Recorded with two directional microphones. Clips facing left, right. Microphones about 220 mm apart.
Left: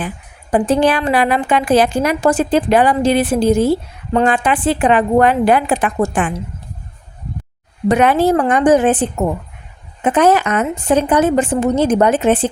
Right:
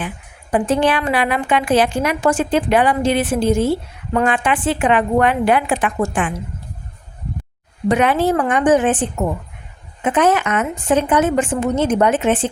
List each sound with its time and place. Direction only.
0.5 s a woman's voice: 35° left (ahead or behind)
7.9 s a woman's voice: 40° left (ahead or behind)